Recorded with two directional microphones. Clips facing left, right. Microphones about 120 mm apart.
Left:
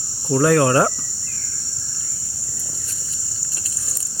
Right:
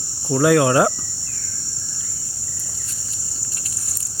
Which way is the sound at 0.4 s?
5° right (ahead or behind).